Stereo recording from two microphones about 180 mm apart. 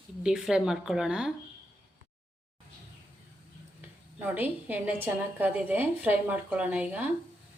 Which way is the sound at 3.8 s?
10° right (ahead or behind).